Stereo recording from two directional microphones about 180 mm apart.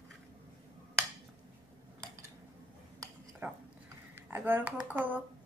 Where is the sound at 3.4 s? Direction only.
10° right (ahead or behind).